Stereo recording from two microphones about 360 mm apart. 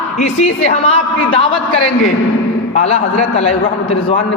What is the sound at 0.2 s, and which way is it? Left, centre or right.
A woman's voice, centre.